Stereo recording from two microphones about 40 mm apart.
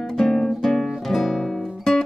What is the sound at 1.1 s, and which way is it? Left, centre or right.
Guitar, centre.